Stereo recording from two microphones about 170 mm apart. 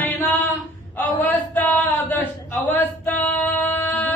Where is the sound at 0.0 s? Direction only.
10° left (ahead or behind).